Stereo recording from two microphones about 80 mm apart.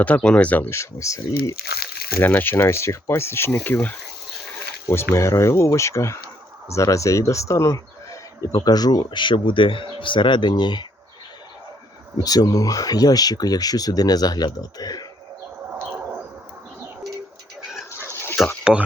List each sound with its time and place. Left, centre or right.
0.0 s speech: centre
0.7 s speech: left
2.2 s speech: left
4.9 s speech: left
12.1 s speech: left
18.4 s a sound: centre